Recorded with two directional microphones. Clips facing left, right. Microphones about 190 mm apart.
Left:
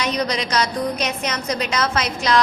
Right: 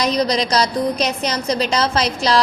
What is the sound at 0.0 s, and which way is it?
A woman's voice, 35° right (ahead or behind).